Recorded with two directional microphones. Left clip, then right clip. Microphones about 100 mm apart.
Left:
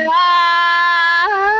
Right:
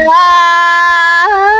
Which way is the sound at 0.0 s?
55° right (ahead or behind).